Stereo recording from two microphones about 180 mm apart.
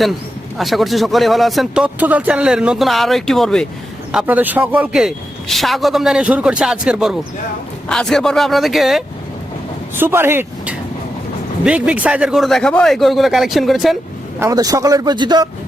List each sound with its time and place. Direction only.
0.5 s speech: centre (ahead or behind)
9.9 s speech: 10° right (ahead or behind)
14.3 s speech: 15° right (ahead or behind)